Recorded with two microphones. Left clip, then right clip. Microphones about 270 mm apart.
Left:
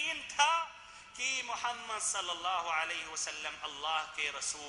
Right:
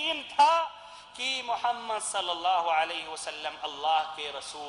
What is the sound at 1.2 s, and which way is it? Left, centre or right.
A man's voice, centre.